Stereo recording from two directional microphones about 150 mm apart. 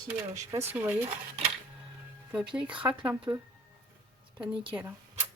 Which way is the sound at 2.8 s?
10° right (ahead or behind).